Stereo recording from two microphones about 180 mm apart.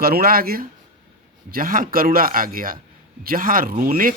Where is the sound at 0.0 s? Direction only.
55° right (ahead or behind).